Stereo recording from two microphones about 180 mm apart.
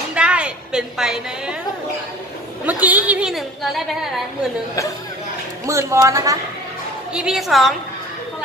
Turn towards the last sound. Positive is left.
turn(degrees=0)  # may be behind; listen again after turning